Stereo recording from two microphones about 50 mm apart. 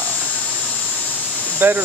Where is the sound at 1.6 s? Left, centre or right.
Right.